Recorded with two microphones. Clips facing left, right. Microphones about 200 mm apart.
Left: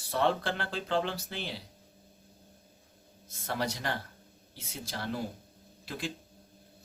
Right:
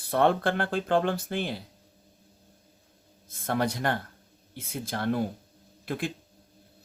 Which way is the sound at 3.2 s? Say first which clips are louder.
Right 6 dB; 50° right (ahead or behind).